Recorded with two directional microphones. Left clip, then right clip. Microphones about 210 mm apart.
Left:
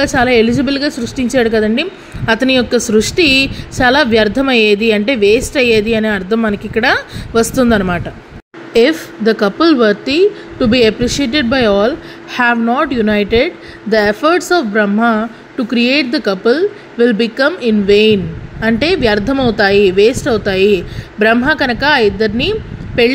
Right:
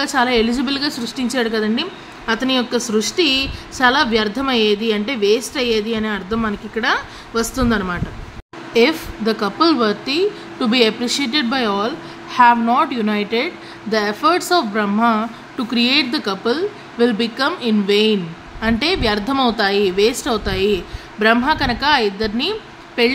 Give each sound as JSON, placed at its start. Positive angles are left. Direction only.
{"t": 0.0, "sound": "a woman's voice", "side_deg": 15}